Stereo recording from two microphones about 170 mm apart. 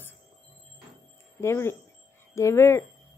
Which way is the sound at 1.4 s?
15° left (ahead or behind).